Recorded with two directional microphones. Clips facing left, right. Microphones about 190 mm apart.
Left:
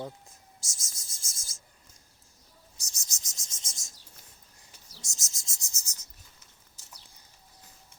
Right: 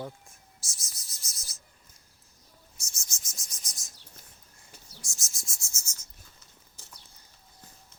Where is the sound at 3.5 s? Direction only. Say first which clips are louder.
Left 2 dB; 25° left (ahead or behind).